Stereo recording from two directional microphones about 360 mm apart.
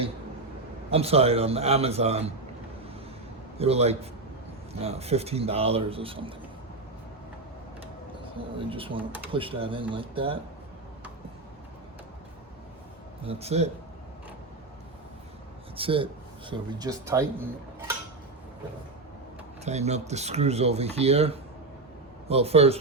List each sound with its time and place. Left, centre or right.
0.9 s speech: centre
3.6 s speech: centre
8.7 s speech: centre
13.2 s speech: centre
15.7 s speech: centre
19.6 s speech: centre